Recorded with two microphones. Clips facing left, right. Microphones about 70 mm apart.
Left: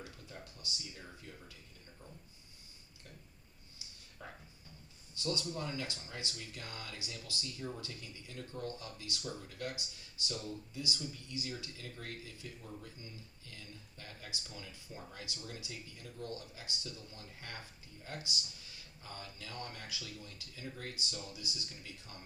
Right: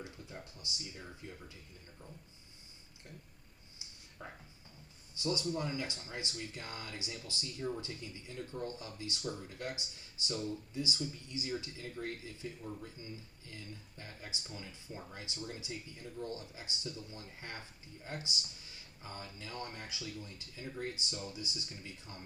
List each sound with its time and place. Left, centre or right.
0.0 s speech: right
4.2 s speech: centre